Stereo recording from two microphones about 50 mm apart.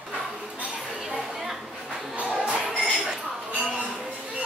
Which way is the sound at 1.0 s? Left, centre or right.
Centre.